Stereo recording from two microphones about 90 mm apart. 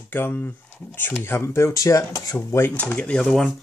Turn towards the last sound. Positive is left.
turn(degrees=5)  # may be behind; listen again after turning